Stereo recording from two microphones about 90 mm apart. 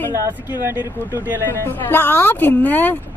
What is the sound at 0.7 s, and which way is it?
Speech, 25° right (ahead or behind).